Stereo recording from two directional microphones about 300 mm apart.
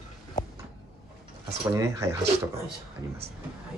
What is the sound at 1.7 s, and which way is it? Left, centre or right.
Speech, centre.